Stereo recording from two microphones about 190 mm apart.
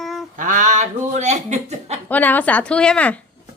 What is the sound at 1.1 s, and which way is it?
Speech, 40° right (ahead or behind).